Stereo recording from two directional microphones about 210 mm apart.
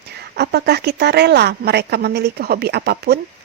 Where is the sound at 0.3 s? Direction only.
50° right (ahead or behind).